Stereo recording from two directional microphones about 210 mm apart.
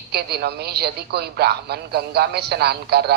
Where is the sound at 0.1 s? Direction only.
50° right (ahead or behind).